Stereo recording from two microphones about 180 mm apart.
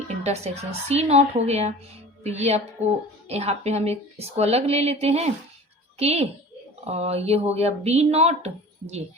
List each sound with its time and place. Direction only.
0.1 s speech: 40° right (ahead or behind)